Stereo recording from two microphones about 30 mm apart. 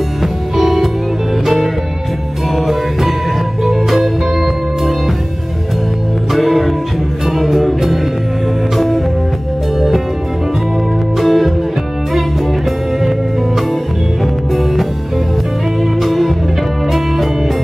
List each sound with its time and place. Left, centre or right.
0.2 s music: centre
6.3 s music: centre
11.1 s music: centre
14.5 s music: centre